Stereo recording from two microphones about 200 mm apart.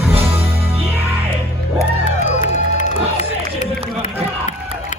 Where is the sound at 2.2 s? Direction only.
40° left (ahead or behind).